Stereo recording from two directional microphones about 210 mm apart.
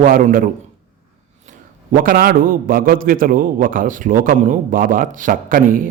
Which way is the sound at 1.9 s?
45° right (ahead or behind).